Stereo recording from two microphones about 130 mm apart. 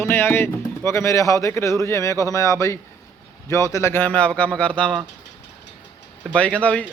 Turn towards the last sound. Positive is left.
turn(degrees=10)  # may be behind; listen again after turning